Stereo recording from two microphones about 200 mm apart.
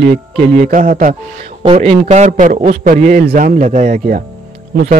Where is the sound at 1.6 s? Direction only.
30° right (ahead or behind).